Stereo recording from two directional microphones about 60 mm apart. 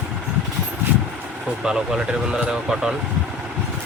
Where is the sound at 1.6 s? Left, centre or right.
Centre.